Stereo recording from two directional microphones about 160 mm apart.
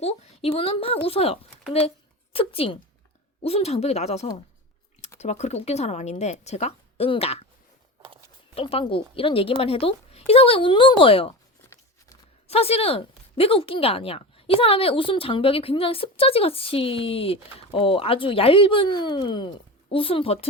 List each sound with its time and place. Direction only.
0.0 s a woman's voice: 40° left (ahead or behind)
8.5 s speech: 35° left (ahead or behind)
12.5 s speech: 40° left (ahead or behind)